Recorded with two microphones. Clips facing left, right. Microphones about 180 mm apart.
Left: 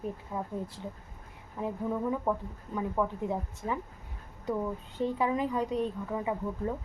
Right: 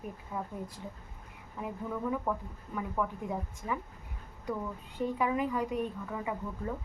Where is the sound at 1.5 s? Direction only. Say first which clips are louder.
Left 5 dB; 25° left (ahead or behind).